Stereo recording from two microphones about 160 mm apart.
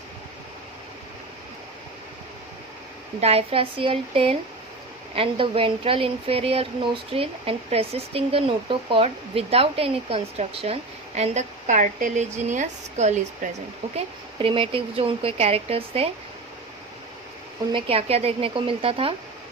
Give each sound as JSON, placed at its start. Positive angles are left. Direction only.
{"t": 3.2, "sound": "speech", "side_deg": -40}
{"t": 13.9, "sound": "speech", "side_deg": -35}
{"t": 17.7, "sound": "speech", "side_deg": -35}